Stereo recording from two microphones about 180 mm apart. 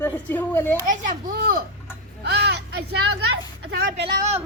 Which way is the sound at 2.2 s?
65° right (ahead or behind).